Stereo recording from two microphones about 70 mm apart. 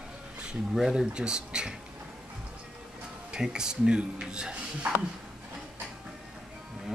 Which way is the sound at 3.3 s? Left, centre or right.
Centre.